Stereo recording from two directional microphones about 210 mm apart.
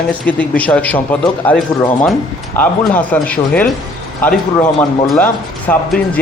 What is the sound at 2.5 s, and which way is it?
A man's voice, 10° left (ahead or behind).